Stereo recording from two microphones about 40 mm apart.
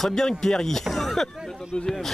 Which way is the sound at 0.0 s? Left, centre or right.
Centre.